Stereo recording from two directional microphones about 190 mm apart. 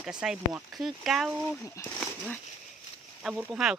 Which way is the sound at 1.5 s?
15° left (ahead or behind).